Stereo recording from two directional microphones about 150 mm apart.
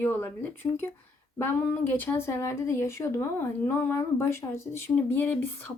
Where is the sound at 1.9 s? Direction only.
15° left (ahead or behind).